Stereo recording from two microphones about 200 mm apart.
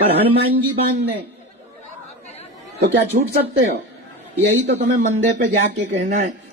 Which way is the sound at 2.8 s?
55° right (ahead or behind).